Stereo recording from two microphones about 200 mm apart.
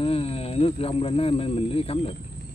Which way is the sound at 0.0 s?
30° left (ahead or behind).